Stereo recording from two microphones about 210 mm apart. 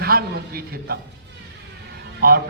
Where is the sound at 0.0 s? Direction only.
45° right (ahead or behind).